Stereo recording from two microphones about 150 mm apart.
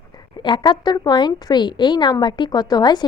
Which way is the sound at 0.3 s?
30° left (ahead or behind).